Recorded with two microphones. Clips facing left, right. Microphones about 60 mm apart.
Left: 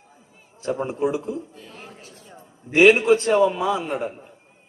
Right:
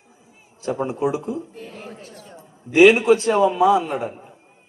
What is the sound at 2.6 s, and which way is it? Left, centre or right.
Speech, left.